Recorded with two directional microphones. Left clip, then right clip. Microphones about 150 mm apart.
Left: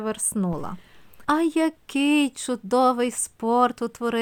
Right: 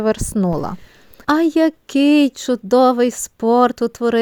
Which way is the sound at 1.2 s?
35° right (ahead or behind).